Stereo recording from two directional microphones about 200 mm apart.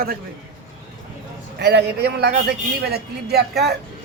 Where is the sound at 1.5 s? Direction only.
55° right (ahead or behind).